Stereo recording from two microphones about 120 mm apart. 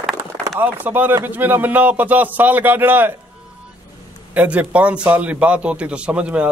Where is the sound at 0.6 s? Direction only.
15° right (ahead or behind).